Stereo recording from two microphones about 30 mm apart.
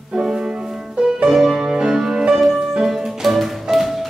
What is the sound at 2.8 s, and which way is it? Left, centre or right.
Music, centre.